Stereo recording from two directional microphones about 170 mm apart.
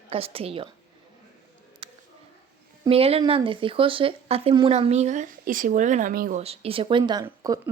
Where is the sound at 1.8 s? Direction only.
30° right (ahead or behind).